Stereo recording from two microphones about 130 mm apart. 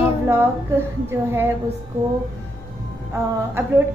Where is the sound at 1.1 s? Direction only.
20° right (ahead or behind).